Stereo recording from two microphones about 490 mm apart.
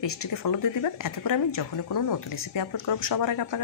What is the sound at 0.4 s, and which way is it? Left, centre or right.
A woman's voice, left.